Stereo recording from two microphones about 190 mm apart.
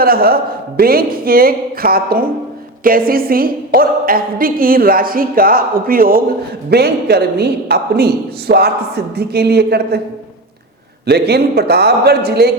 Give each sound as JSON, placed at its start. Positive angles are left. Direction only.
{"t": 0.0, "sound": "a woman's voice", "side_deg": -50}
{"t": 11.0, "sound": "a woman's voice", "side_deg": -60}